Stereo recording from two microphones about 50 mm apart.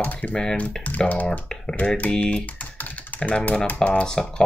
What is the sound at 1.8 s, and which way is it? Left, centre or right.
Speech, left.